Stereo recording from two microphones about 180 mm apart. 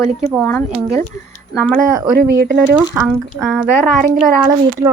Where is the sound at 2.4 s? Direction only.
55° right (ahead or behind).